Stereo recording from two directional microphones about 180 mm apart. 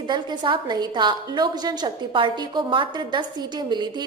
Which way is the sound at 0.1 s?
25° right (ahead or behind).